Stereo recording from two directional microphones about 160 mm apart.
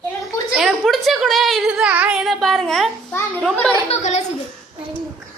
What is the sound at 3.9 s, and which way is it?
Speech, 45° left (ahead or behind).